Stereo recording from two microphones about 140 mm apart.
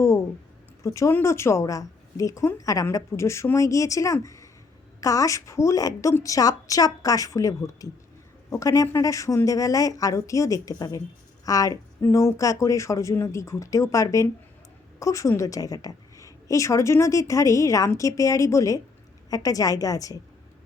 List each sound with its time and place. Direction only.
0.8 s a woman's voice: 20° left (ahead or behind)